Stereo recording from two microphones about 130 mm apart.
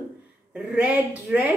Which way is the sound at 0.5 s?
10° right (ahead or behind).